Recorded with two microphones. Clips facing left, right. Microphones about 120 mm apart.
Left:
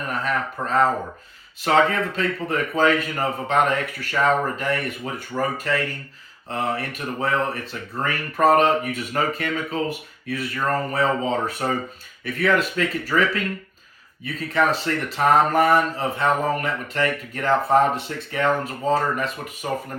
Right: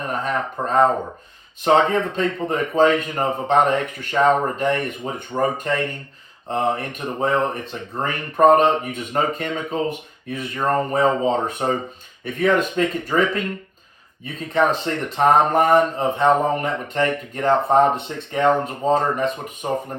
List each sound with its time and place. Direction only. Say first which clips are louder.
0.2 s speech: even; 25° right (ahead or behind)
14.8 s speech: right 2 dB; 20° right (ahead or behind)